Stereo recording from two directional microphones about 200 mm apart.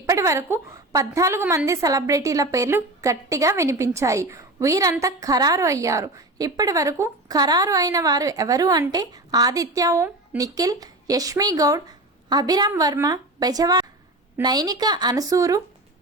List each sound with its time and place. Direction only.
0.0 s a woman's voice: 15° right (ahead or behind)